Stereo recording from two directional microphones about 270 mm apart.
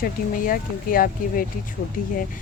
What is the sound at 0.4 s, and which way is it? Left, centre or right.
Speech, left.